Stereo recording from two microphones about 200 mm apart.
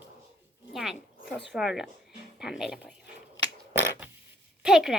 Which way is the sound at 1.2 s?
60° left (ahead or behind).